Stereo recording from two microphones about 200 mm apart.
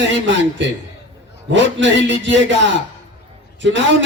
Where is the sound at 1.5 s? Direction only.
65° right (ahead or behind).